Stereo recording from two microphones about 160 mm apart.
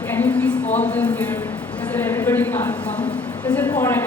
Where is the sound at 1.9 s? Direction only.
10° left (ahead or behind).